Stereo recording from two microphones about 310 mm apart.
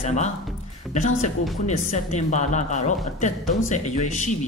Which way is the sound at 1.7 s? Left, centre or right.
Left.